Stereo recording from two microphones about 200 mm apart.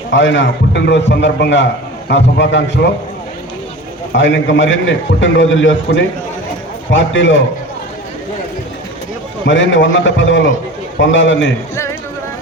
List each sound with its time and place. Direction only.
0.1 s a man's voice: 65° left (ahead or behind)
4.1 s a man's voice: 65° left (ahead or behind)
9.5 s a man's voice: 70° left (ahead or behind)
11.7 s a sound: 15° left (ahead or behind)